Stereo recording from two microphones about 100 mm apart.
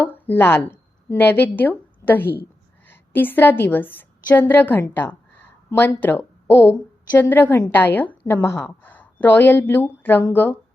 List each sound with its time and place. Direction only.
0.0 s a woman's voice: 20° left (ahead or behind)